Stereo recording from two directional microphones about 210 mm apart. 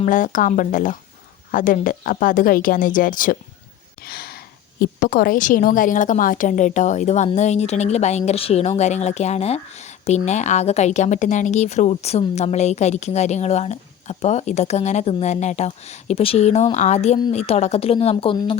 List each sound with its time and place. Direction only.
0.0 s a woman's voice: 40° left (ahead or behind)